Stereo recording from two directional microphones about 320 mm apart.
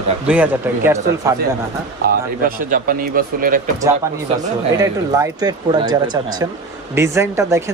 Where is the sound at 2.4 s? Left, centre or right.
Right.